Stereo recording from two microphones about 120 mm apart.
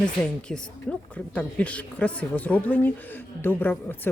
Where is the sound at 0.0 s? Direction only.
5° left (ahead or behind).